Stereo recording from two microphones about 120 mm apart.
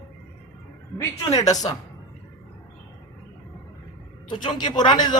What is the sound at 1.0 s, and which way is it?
Speech, 30° left (ahead or behind).